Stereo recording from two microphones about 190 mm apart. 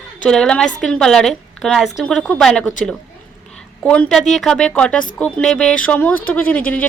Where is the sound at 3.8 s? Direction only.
5° left (ahead or behind).